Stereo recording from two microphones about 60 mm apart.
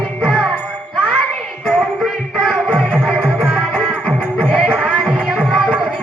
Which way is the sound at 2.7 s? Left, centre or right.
Right.